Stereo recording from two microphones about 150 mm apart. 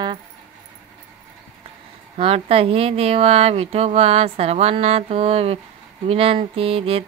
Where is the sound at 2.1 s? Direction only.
40° right (ahead or behind).